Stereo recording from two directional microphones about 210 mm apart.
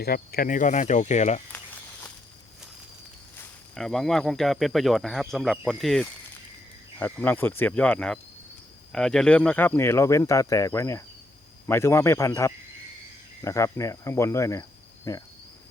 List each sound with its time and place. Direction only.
0.0 s speech: 45° left (ahead or behind)
3.8 s speech: centre (ahead or behind)